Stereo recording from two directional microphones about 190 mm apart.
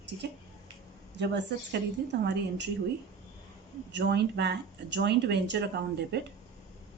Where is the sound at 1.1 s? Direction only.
65° right (ahead or behind).